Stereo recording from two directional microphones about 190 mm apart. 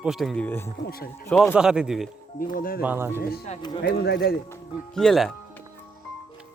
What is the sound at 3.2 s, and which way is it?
A man's voice, 55° left (ahead or behind).